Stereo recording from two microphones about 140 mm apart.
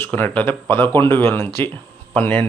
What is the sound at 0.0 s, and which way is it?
A man's voice, 10° left (ahead or behind).